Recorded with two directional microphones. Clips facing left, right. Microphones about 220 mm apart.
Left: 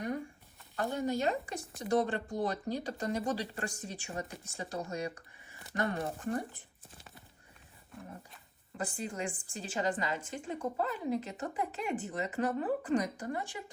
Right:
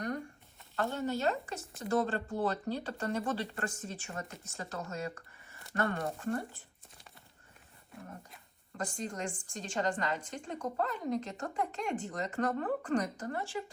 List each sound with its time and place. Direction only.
0.8 s speech: 15° left (ahead or behind)
8.8 s speech: 5° left (ahead or behind)